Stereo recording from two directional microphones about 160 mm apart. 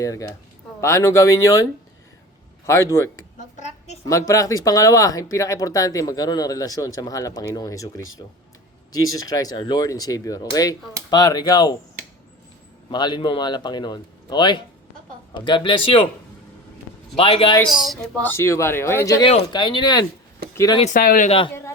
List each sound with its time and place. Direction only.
0.0 s speech: 20° left (ahead or behind)
2.6 s speech: 15° left (ahead or behind)
3.5 s a sound: 45° left (ahead or behind)
4.0 s speech: 20° left (ahead or behind)
12.9 s speech: 30° left (ahead or behind)
17.2 s speech: 35° left (ahead or behind)
17.6 s speech: centre (ahead or behind)
18.2 s speech: 15° left (ahead or behind)
19.2 s speech: 30° left (ahead or behind)
20.8 s speech: 60° left (ahead or behind)
21.2 s speech: 35° left (ahead or behind)